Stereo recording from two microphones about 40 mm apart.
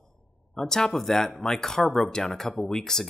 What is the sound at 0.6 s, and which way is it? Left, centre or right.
Speech, centre.